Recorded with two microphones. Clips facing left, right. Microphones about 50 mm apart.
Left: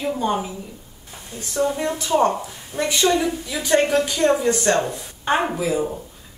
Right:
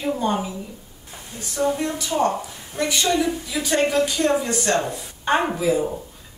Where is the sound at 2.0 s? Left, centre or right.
Left.